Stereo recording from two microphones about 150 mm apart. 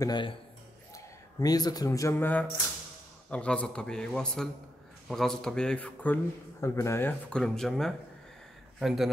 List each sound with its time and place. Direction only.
0.0 s a man's voice: 30° left (ahead or behind); by 6.1 s 10° left (ahead or behind)
6.6 s speech: 20° left (ahead or behind); by 9.1 s centre (ahead or behind)